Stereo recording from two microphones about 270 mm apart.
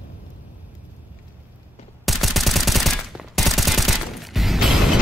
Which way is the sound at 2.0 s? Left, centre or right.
Centre.